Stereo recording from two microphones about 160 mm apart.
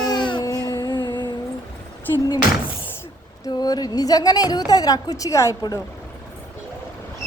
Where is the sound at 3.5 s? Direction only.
25° left (ahead or behind).